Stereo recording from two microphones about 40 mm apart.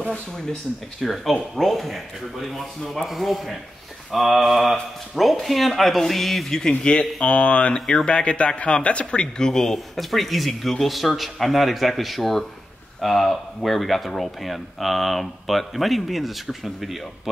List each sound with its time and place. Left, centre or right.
1.0 s speech: centre
6.8 s speech: left
9.5 s speech: centre